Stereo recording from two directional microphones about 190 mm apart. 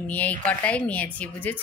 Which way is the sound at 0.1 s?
10° left (ahead or behind).